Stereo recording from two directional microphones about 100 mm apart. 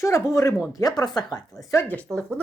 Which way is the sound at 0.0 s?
30° left (ahead or behind).